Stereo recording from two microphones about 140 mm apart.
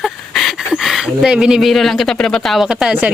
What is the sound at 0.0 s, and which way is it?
Speech, centre (ahead or behind).